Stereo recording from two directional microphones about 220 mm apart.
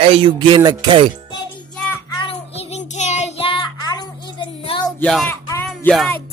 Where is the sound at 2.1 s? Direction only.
30° left (ahead or behind).